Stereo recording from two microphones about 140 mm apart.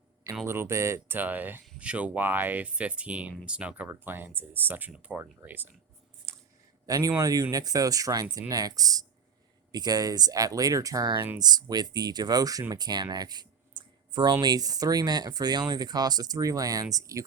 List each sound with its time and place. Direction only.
0.4 s speech: 20° right (ahead or behind)
6.3 s a sound: 20° right (ahead or behind)
6.8 s a man's voice: 25° right (ahead or behind)